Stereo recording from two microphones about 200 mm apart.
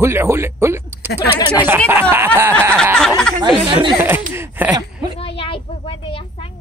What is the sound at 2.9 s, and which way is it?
Speech, 5° left (ahead or behind).